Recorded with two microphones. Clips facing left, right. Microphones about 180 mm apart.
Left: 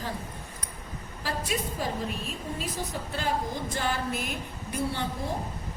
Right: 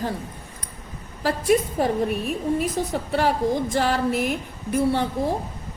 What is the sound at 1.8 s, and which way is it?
A woman's voice, 60° right (ahead or behind).